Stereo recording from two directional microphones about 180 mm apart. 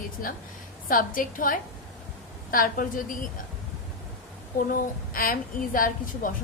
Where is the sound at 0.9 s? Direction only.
50° left (ahead or behind).